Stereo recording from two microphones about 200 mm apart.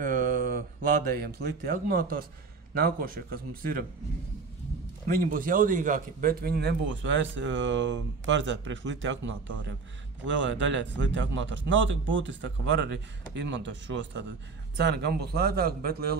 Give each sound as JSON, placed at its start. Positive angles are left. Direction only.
{"t": 0.0, "sound": "a man's voice", "side_deg": -45}
{"t": 5.0, "sound": "a man's voice", "side_deg": -45}